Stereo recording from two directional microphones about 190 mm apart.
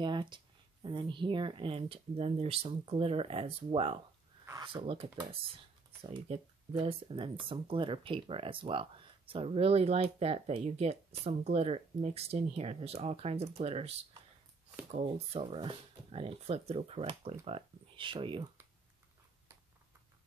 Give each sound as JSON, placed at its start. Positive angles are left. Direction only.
{"t": 0.0, "sound": "a sound", "side_deg": -25}
{"t": 0.8, "sound": "speech", "side_deg": -25}
{"t": 15.0, "sound": "speech", "side_deg": -30}